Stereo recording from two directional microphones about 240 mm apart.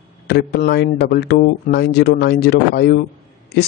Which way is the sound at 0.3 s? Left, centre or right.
Left.